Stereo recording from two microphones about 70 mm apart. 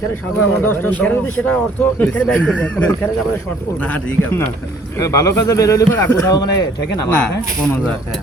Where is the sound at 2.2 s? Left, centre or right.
Centre.